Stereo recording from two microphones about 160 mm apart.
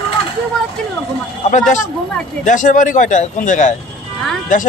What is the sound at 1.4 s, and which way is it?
Speech, 50° left (ahead or behind).